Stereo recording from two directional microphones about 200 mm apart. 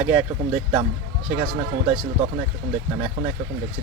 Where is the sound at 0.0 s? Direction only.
15° right (ahead or behind).